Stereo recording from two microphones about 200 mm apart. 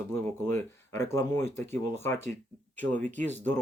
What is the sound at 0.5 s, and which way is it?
Speech, 15° left (ahead or behind).